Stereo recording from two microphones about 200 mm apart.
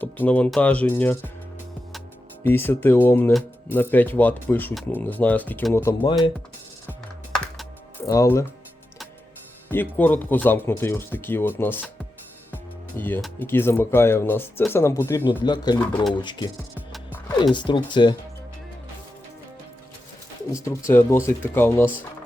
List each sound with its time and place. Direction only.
0.0 s speech: 10° left (ahead or behind)
2.4 s speech: 10° left (ahead or behind)
8.0 s speech: 15° left (ahead or behind)
9.6 s speech: 10° left (ahead or behind)
13.0 s speech: 10° left (ahead or behind)
15.8 s speech: 5° left (ahead or behind)
16.2 s speech: 20° left (ahead or behind)
20.9 s speech: 10° left (ahead or behind)